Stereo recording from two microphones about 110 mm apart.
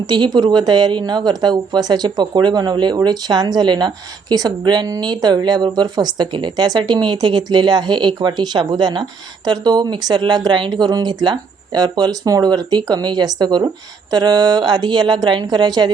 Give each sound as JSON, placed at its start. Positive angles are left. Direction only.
{"t": 0.0, "sound": "a woman's voice", "side_deg": -40}